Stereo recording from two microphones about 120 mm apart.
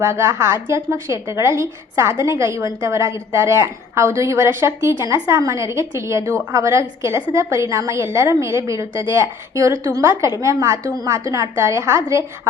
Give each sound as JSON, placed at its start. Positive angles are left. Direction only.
{"t": 0.0, "sound": "a woman's voice", "side_deg": -25}